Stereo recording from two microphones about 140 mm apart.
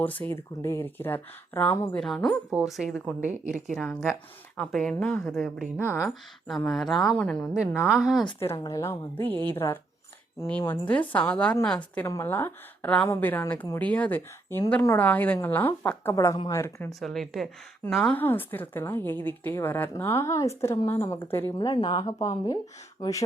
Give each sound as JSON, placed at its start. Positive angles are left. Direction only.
{"t": 0.0, "sound": "speech", "side_deg": 10}
{"t": 2.5, "sound": "a woman's voice", "side_deg": -5}
{"t": 3.2, "sound": "speech", "side_deg": -60}
{"t": 4.5, "sound": "a woman's voice", "side_deg": 5}
{"t": 5.7, "sound": "speech", "side_deg": 15}
{"t": 6.7, "sound": "a woman's voice", "side_deg": 5}
{"t": 7.5, "sound": "a woman's voice", "side_deg": -5}
{"t": 8.4, "sound": "speech", "side_deg": 20}
{"t": 9.6, "sound": "speech", "side_deg": 25}
{"t": 10.7, "sound": "speech", "side_deg": 10}
{"t": 17.0, "sound": "a woman's voice", "side_deg": 0}
{"t": 21.7, "sound": "speech", "side_deg": 30}